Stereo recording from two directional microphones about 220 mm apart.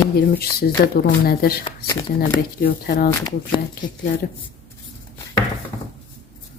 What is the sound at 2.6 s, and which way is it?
Speech, 45° left (ahead or behind).